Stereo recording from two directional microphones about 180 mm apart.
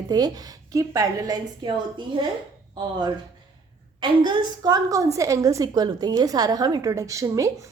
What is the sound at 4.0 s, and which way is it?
A woman's voice, 25° right (ahead or behind).